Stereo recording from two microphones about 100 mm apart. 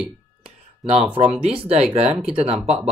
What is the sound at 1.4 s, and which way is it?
Speech, 75° right (ahead or behind).